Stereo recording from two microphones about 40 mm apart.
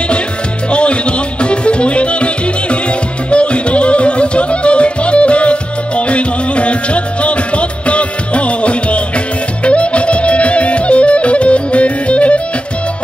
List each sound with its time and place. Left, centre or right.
0.7 s music: left